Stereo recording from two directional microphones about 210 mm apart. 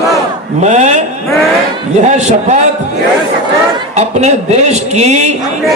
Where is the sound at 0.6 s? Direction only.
35° right (ahead or behind).